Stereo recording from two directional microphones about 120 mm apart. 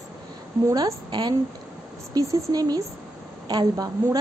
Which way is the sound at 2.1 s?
30° right (ahead or behind).